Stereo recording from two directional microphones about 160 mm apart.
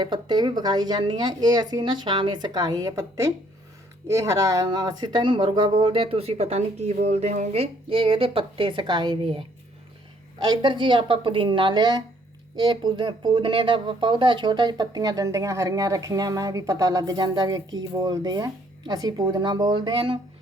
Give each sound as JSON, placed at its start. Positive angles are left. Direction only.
{"t": 0.0, "sound": "speech", "side_deg": -25}
{"t": 10.4, "sound": "speech", "side_deg": -25}